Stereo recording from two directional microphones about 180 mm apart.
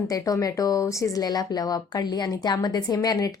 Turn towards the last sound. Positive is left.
turn(degrees=20)  # may be behind; listen again after turning